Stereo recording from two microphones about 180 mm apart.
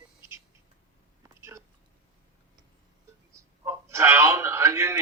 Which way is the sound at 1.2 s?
15° right (ahead or behind).